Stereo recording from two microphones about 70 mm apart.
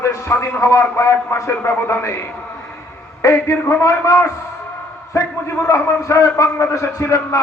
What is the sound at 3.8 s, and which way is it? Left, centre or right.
A man's voice, left.